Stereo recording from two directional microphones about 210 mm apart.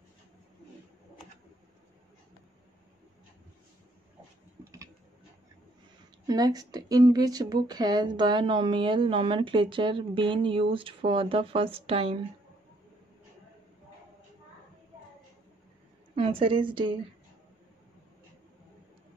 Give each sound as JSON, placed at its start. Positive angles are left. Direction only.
{"t": 6.2, "sound": "a woman's voice", "side_deg": -20}
{"t": 16.2, "sound": "a woman's voice", "side_deg": -25}